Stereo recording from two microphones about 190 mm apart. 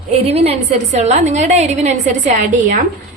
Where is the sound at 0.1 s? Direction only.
35° right (ahead or behind).